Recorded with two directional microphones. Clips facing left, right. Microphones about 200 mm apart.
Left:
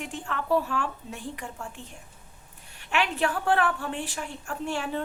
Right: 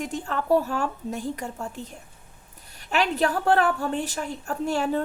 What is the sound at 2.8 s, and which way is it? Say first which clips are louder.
A woman's voice: right 3 dB; 40° right (ahead or behind).